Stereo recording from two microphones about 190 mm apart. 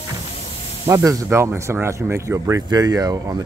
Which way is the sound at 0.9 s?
15° right (ahead or behind).